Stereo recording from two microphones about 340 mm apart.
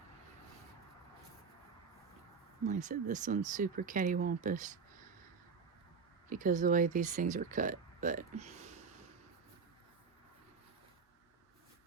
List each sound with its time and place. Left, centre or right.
2.6 s speech: right
6.2 s speech: right